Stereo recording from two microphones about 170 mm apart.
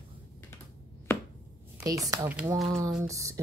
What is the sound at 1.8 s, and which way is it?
Speech, 20° right (ahead or behind).